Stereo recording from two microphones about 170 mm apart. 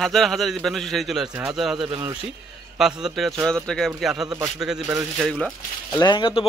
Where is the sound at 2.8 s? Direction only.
5° right (ahead or behind).